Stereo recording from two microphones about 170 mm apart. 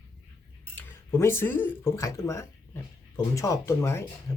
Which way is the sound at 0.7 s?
15° left (ahead or behind).